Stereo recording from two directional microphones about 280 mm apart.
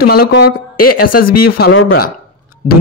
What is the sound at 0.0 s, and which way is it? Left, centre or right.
Speech, left.